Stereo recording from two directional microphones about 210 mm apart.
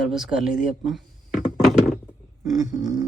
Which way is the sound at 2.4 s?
Centre (ahead or behind).